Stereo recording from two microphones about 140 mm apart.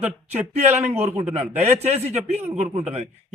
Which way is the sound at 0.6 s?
55° right (ahead or behind).